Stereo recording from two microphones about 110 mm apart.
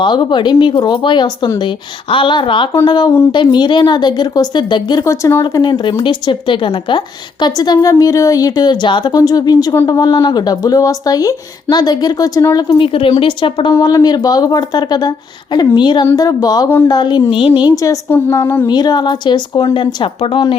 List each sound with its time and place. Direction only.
0.0 s a woman's voice: 45° left (ahead or behind)
5.0 s speech: 25° left (ahead or behind)
5.4 s a woman's voice: 40° left (ahead or behind)
12.6 s speech: 55° left (ahead or behind)
13.7 s a woman's voice: 35° left (ahead or behind)
16.1 s a woman's voice: 35° left (ahead or behind)
17.2 s speech: 55° left (ahead or behind)
18.1 s speech: 20° left (ahead or behind)
18.7 s a woman's voice: 40° left (ahead or behind)